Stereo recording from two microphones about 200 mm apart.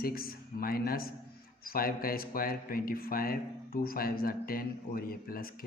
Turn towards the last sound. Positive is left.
turn(degrees=45)  # may be behind; listen again after turning